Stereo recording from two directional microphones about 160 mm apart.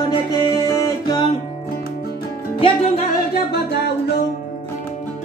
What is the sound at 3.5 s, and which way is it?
Music, 90° left.